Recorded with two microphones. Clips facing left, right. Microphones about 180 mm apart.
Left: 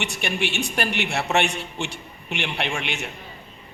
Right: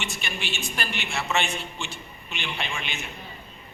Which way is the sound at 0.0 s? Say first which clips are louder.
Left 7 dB; 65° left (ahead or behind).